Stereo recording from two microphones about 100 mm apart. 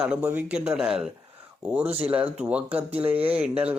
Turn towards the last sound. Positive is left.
turn(degrees=-15)  # may be behind; listen again after turning